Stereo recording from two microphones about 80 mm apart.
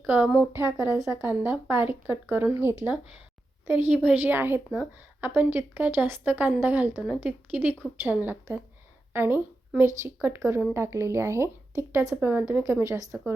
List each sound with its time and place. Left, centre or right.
0.0 s speech: right
0.5 s speech: right
1.2 s a woman's voice: right
12.8 s speech: right